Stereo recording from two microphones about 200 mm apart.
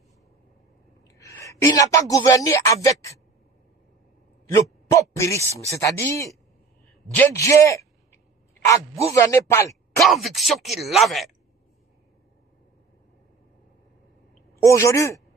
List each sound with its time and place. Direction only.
1.0 s speech: 15° left (ahead or behind)
4.5 s a man's voice: 15° left (ahead or behind)
9.0 s a man's voice: 15° left (ahead or behind)
10.0 s speech: centre (ahead or behind)
14.5 s a man's voice: 15° left (ahead or behind)